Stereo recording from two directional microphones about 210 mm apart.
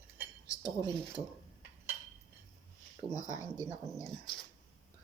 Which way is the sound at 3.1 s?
15° left (ahead or behind).